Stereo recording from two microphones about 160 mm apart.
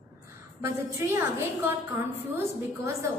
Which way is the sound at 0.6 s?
15° right (ahead or behind).